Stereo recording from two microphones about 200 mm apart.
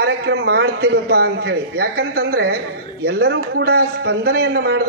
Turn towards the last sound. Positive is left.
turn(degrees=-55)  # may be behind; listen again after turning